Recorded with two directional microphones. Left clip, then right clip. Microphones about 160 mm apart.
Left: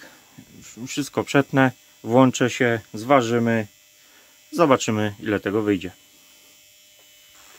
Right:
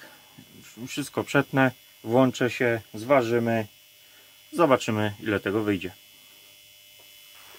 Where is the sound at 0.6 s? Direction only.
35° left (ahead or behind); by 3.7 s 60° left (ahead or behind).